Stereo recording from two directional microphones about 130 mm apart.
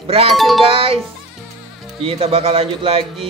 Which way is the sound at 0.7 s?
45° right (ahead or behind).